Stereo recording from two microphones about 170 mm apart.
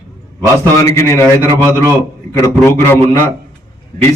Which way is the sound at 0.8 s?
15° left (ahead or behind).